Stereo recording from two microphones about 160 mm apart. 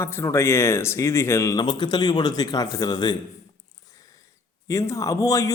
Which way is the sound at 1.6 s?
30° left (ahead or behind).